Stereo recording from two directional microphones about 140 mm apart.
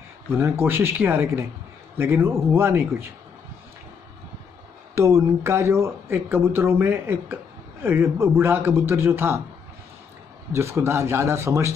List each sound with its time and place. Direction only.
0.3 s a man's voice: 15° right (ahead or behind)
4.9 s a man's voice: 20° right (ahead or behind)
10.5 s speech: 20° right (ahead or behind)